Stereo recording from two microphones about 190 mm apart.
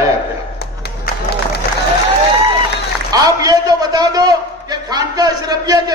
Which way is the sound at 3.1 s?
20° right (ahead or behind).